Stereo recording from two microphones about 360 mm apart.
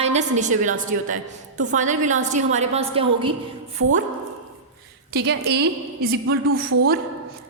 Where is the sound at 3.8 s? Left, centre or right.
Right.